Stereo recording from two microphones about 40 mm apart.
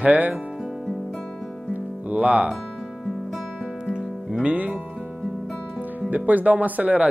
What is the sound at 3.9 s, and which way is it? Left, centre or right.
Music, right.